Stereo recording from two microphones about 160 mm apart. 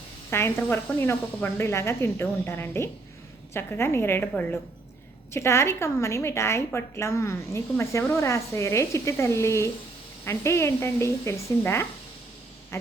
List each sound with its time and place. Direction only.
0.3 s a woman's voice: 15° left (ahead or behind)
12.7 s quack: 15° left (ahead or behind)